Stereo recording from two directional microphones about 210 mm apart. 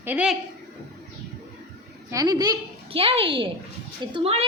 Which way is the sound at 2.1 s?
15° right (ahead or behind).